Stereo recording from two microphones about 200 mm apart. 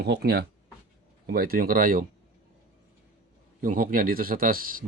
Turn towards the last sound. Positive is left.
turn(degrees=-45)  # may be behind; listen again after turning